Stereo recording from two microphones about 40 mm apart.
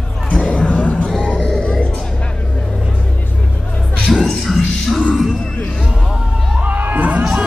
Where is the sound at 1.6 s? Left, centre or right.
Left.